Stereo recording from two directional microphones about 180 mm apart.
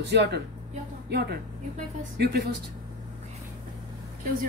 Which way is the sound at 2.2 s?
65° right (ahead or behind).